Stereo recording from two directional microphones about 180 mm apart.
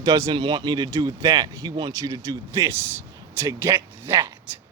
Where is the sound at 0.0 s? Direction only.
20° right (ahead or behind).